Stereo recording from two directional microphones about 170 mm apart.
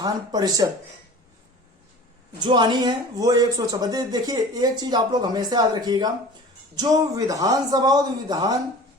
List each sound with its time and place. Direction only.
0.0 s speech: 25° right (ahead or behind)
2.4 s speech: 25° right (ahead or behind)